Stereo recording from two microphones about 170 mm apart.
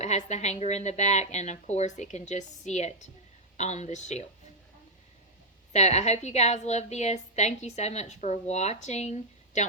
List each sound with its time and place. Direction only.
0.0 s a woman's voice: 45° left (ahead or behind)
5.7 s a woman's voice: 40° left (ahead or behind)